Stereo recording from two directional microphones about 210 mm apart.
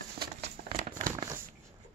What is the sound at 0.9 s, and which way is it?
Crumpling, 20° right (ahead or behind).